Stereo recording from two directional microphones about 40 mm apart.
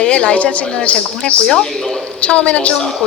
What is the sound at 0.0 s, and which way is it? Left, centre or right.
Speech, left.